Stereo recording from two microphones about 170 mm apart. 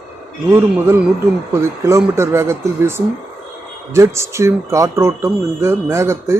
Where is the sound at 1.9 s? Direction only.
15° right (ahead or behind).